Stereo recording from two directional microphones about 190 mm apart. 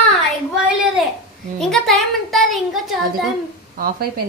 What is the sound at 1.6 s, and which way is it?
A woman's voice, centre (ahead or behind).